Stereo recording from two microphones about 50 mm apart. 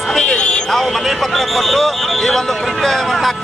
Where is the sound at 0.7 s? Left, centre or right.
Centre.